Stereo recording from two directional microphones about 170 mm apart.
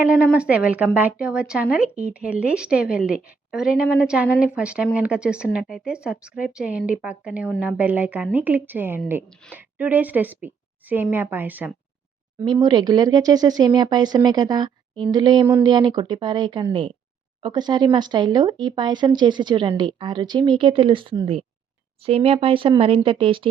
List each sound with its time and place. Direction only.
0.0 s a woman's voice: 10° right (ahead or behind)
12.5 s speech: 25° right (ahead or behind)